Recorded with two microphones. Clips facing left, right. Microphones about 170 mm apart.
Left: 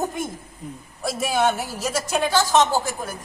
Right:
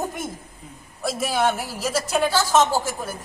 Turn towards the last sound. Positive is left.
turn(degrees=-10)  # may be behind; listen again after turning